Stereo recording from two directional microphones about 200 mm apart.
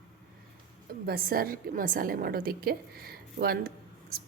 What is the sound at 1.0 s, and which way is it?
Speech, 50° right (ahead or behind).